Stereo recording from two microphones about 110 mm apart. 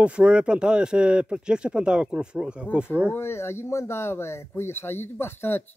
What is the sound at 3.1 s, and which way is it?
Speech, 25° left (ahead or behind).